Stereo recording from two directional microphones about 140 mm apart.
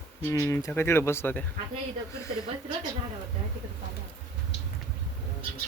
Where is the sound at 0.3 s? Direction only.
20° left (ahead or behind).